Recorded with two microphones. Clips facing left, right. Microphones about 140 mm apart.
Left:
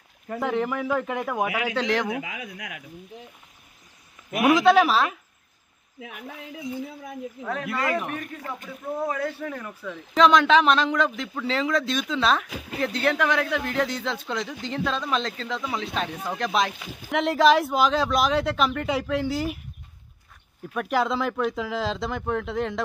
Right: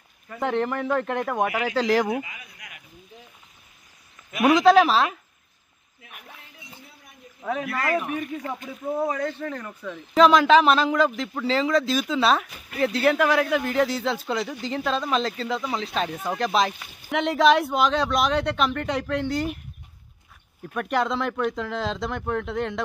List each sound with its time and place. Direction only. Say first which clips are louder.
0.4 s speech: right 1 dB; 5° left (ahead or behind)
2.2 s a man's voice: left 9 dB; 90° left
4.4 s speech: right 1 dB; centre (ahead or behind)
6.4 s a man's voice: left 16 dB; 90° left
7.6 s a man's voice: even; 20° left (ahead or behind)
9.0 s speech: left 1 dB; 5° left (ahead or behind)
12.4 s a man's voice: left 2 dB; 90° left
12.8 s speech: right 3 dB; 5° right (ahead or behind)
20.7 s speech: even; centre (ahead or behind)